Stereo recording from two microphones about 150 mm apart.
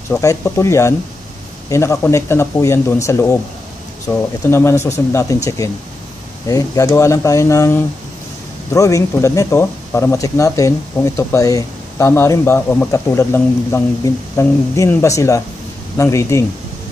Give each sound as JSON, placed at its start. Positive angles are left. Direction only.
{"t": 0.2, "sound": "speech", "side_deg": 20}